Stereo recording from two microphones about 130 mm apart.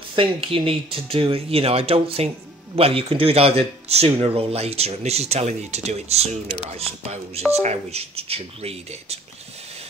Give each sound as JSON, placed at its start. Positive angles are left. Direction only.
{"t": 0.1, "sound": "speech", "side_deg": -40}